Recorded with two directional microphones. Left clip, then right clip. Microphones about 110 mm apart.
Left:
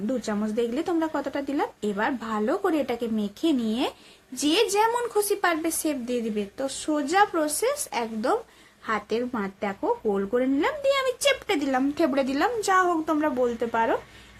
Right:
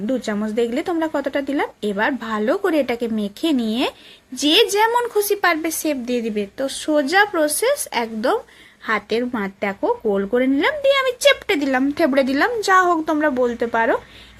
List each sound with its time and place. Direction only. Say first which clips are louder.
0.0 s speech: right 5 dB; 25° right (ahead or behind)